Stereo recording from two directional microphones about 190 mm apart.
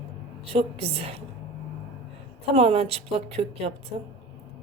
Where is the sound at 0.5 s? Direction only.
30° right (ahead or behind).